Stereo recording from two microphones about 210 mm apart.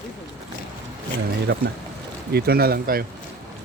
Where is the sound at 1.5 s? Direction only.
50° right (ahead or behind).